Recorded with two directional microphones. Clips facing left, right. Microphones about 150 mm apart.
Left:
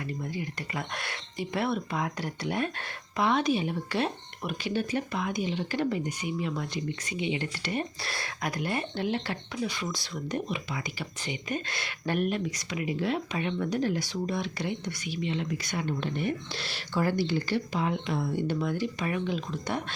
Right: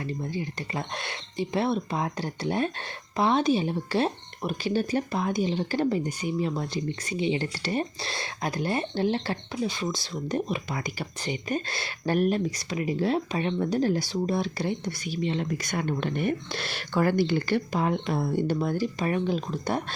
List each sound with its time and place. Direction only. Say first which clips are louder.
0.1 s speech: right 3 dB; 30° right (ahead or behind)